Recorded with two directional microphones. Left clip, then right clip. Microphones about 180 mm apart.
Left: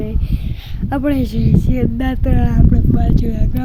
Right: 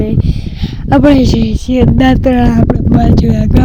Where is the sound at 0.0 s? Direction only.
35° right (ahead or behind).